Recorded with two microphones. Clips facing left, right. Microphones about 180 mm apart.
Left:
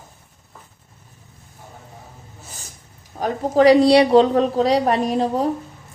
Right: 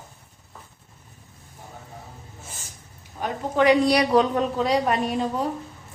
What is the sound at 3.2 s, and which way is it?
A woman's voice, 40° left (ahead or behind).